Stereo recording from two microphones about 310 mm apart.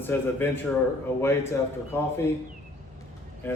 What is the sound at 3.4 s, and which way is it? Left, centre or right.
Speech, centre.